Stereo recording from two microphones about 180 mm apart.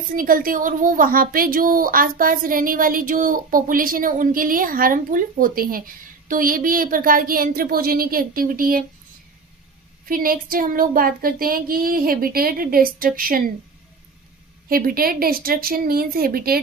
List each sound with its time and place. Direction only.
0.1 s a woman's voice: 50° right (ahead or behind)
10.1 s a woman's voice: 50° right (ahead or behind)
14.7 s speech: 55° right (ahead or behind)